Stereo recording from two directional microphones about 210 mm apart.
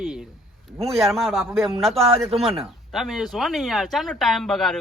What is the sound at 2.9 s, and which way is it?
Speech, centre (ahead or behind).